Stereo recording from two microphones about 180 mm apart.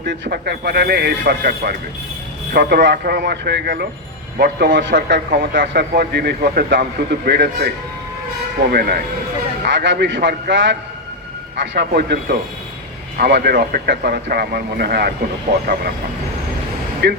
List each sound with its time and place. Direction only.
0.1 s a man's voice: 60° right (ahead or behind)
8.7 s a man's voice: 60° right (ahead or behind)
9.6 s a man's voice: 80° right
11.9 s a man's voice: 60° right (ahead or behind)
17.0 s a man's voice: 70° right (ahead or behind)